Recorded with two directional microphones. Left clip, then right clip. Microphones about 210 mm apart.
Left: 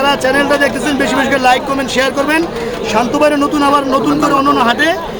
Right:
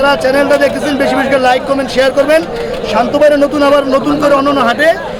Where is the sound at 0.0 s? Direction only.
5° right (ahead or behind).